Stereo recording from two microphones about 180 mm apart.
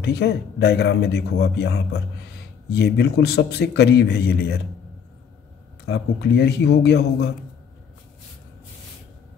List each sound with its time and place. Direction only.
0.0 s a man's voice: 65° left (ahead or behind)
5.9 s a man's voice: 65° left (ahead or behind)